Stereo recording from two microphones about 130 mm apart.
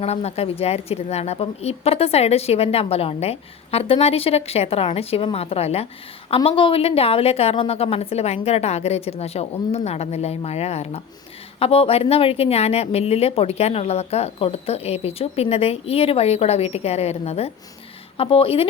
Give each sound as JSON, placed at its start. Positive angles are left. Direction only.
{"t": 0.0, "sound": "speech", "side_deg": 55}